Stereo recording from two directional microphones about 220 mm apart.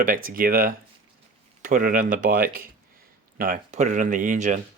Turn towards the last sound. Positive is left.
turn(degrees=-35)  # may be behind; listen again after turning